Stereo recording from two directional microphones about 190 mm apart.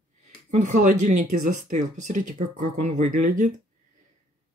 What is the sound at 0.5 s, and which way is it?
Speech, 40° right (ahead or behind).